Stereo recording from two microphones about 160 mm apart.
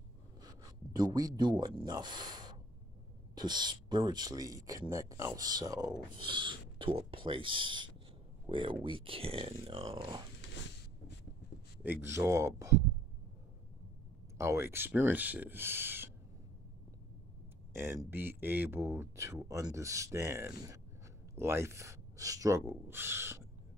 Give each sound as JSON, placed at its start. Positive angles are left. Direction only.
{"t": 0.4, "sound": "speech", "side_deg": -20}
{"t": 11.8, "sound": "speech", "side_deg": -15}
{"t": 14.4, "sound": "speech", "side_deg": -15}
{"t": 17.7, "sound": "speech", "side_deg": -15}